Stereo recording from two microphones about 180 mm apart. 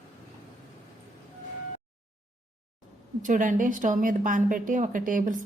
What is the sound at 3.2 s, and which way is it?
A woman's voice, 45° right (ahead or behind).